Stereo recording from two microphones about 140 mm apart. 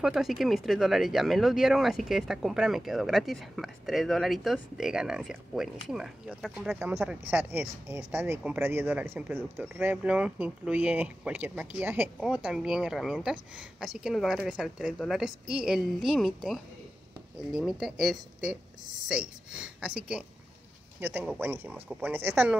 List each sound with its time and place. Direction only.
0.0 s speech: 5° right (ahead or behind)